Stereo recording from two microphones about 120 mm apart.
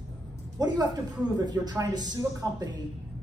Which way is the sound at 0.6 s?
35° right (ahead or behind).